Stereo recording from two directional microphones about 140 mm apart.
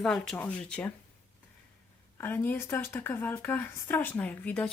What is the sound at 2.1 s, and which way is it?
Speech, 15° left (ahead or behind).